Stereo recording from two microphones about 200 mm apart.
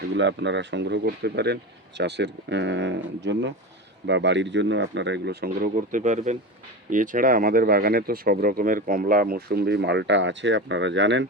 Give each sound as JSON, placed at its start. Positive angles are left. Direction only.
{"t": 0.2, "sound": "speech", "side_deg": -65}
{"t": 6.0, "sound": "speech", "side_deg": -35}